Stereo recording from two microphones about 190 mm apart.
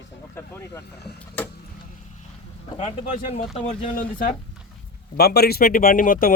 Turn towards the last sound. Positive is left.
turn(degrees=45)  # may be behind; listen again after turning